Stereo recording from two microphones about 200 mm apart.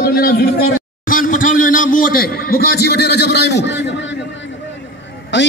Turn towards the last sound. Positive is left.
turn(degrees=65)  # may be behind; listen again after turning